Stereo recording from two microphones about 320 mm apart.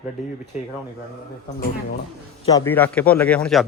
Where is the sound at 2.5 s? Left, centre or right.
Centre.